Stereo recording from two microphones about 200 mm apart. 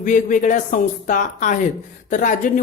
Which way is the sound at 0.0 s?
40° left (ahead or behind).